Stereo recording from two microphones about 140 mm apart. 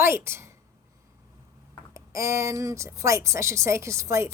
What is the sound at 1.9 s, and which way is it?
A woman's voice, 20° right (ahead or behind).